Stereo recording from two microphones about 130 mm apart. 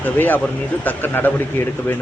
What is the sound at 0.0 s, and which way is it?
Speech, 15° left (ahead or behind).